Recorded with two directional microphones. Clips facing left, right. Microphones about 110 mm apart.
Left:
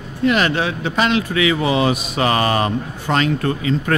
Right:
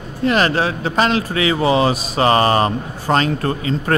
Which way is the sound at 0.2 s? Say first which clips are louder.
Right 1 dB; 35° right (ahead or behind).